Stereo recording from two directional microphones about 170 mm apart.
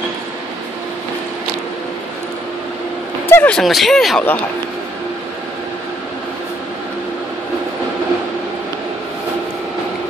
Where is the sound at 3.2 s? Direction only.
10° left (ahead or behind).